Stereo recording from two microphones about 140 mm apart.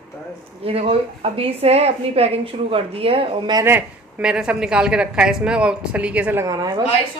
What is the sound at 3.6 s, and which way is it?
A woman's voice, 15° right (ahead or behind).